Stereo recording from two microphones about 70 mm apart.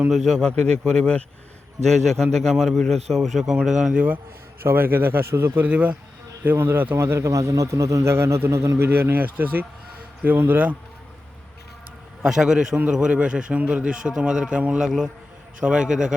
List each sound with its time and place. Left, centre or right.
0.1 s a man's voice: centre
4.6 s a man's voice: right
5.5 s speech: right
6.4 s a man's voice: right
8.1 s a man's voice: right
8.9 s speech: right
12.2 s a man's voice: centre